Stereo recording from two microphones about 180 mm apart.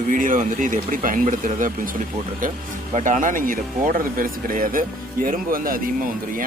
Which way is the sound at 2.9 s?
45° right (ahead or behind).